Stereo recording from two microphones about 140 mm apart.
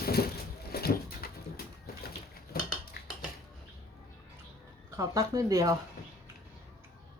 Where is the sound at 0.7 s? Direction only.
90° left.